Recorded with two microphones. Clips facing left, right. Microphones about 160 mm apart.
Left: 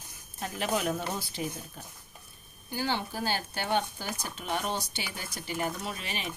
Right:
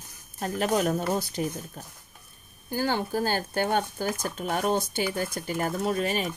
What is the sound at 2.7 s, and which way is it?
Speech, 45° right (ahead or behind).